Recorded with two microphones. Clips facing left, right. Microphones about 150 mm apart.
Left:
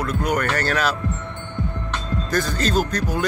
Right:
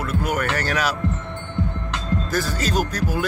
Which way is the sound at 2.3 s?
5° right (ahead or behind).